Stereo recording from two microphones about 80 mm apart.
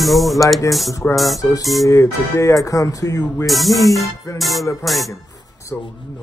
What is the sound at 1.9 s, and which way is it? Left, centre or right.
Music, left.